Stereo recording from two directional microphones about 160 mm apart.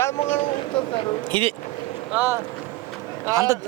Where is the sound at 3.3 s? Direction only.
20° right (ahead or behind).